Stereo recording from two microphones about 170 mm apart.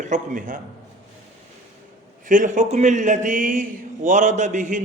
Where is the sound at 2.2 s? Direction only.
50° right (ahead or behind).